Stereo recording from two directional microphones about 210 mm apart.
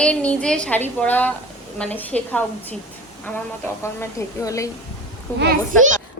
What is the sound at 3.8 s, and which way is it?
Speech, 15° left (ahead or behind).